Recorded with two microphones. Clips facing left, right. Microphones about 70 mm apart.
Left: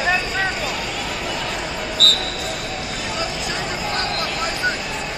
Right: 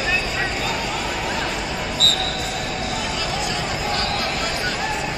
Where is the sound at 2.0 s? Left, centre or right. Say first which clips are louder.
Left 4 dB; left.